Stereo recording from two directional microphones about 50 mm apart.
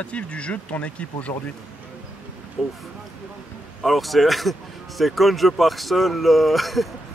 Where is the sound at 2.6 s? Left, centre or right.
Centre.